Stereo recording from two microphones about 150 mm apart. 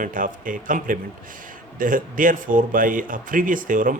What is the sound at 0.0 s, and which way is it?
Speech, 60° right (ahead or behind).